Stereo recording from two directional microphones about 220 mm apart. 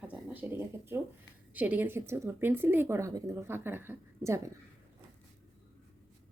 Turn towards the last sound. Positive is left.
turn(degrees=-15)  # may be behind; listen again after turning